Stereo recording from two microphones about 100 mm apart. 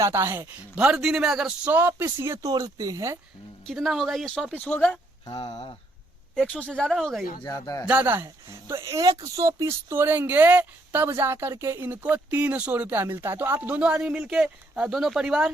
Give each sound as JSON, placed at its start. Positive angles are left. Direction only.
{"t": 0.0, "sound": "speech", "side_deg": -25}
{"t": 0.8, "sound": "speech", "side_deg": -10}
{"t": 3.7, "sound": "speech", "side_deg": 0}
{"t": 4.5, "sound": "speech", "side_deg": 15}
{"t": 5.3, "sound": "speech", "side_deg": 80}
{"t": 6.4, "sound": "speech", "side_deg": 10}
{"t": 6.9, "sound": "speech", "side_deg": 0}
{"t": 7.4, "sound": "speech", "side_deg": 40}
{"t": 7.9, "sound": "speech", "side_deg": -20}